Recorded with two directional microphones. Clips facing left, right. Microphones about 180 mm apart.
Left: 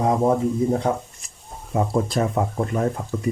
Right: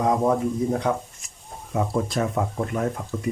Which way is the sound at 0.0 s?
30° left (ahead or behind).